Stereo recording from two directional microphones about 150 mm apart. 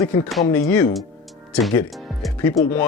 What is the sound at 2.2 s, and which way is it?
Music, centre (ahead or behind).